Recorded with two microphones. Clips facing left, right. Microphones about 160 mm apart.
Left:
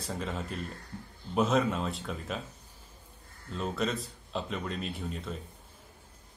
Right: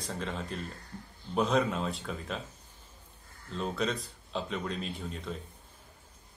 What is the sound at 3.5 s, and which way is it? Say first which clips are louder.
Speech: even; centre (ahead or behind).